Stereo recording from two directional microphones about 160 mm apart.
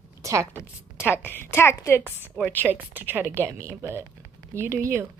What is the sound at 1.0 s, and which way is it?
Speech, 15° left (ahead or behind).